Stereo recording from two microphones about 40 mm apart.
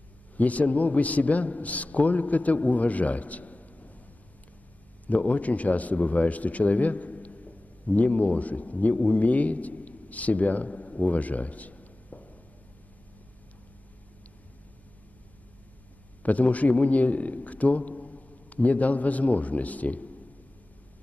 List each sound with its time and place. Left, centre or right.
0.4 s a man's voice: left
5.0 s a man's voice: left
16.2 s a man's voice: left